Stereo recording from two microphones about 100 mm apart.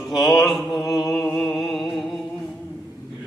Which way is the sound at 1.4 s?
Centre (ahead or behind).